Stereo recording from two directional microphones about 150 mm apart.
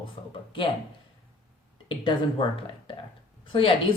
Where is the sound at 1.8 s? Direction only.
35° left (ahead or behind).